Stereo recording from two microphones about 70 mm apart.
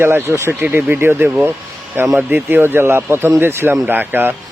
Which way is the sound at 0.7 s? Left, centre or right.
Right.